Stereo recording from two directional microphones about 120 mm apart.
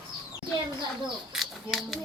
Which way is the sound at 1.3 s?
Centre (ahead or behind).